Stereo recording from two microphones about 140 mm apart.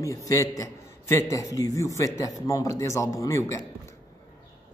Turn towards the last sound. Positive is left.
turn(degrees=20)  # may be behind; listen again after turning